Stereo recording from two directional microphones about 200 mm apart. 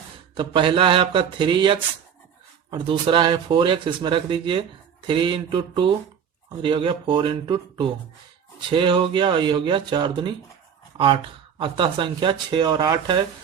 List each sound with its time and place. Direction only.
0.3 s speech: 25° right (ahead or behind)